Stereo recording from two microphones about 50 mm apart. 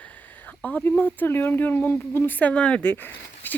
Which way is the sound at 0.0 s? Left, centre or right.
Left.